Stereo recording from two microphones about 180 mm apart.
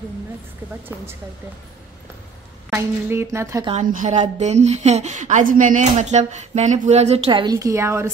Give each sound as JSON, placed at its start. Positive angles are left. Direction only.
{"t": 2.7, "sound": "speech", "side_deg": -15}
{"t": 3.7, "sound": "speech", "side_deg": -45}